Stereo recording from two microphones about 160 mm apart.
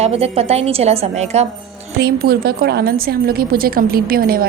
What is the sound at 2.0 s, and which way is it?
A woman's voice, 85° right.